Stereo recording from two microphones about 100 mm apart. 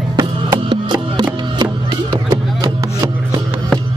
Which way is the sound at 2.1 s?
35° right (ahead or behind).